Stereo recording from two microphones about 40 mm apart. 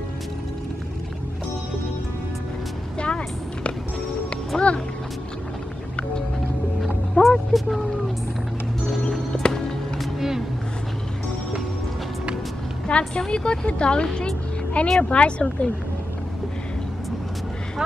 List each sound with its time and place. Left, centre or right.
3.0 s a sound: left
4.5 s speech: centre
7.2 s vehicle: centre
9.3 s music: centre
12.8 s vehicle: left
13.3 s speech: left